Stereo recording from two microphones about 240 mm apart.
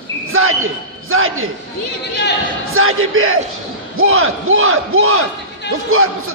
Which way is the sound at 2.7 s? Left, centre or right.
Right.